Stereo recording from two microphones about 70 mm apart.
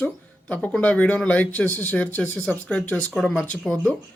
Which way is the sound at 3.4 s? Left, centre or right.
Centre.